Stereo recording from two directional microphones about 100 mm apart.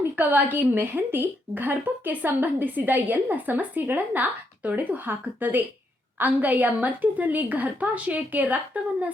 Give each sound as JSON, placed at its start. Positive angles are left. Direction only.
{"t": 0.0, "sound": "a woman's voice", "side_deg": -20}